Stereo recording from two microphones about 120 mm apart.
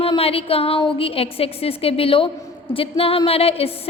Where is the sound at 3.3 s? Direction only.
55° left (ahead or behind).